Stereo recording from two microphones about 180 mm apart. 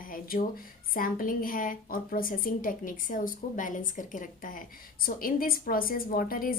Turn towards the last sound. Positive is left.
turn(degrees=50)  # may be behind; listen again after turning